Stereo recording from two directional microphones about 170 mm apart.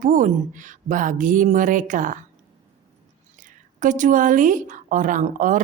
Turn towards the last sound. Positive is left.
turn(degrees=-50)  # may be behind; listen again after turning